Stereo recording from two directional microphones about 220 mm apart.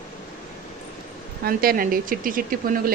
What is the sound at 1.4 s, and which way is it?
A woman's voice, 45° right (ahead or behind).